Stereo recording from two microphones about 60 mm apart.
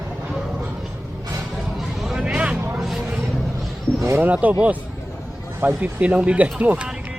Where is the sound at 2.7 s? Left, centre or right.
Centre.